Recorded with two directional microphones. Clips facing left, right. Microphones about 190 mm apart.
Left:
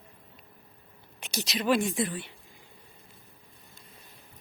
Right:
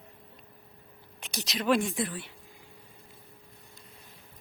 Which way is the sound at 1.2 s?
Centre (ahead or behind).